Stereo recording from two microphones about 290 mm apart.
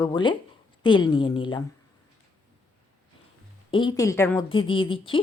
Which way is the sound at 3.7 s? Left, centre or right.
Centre.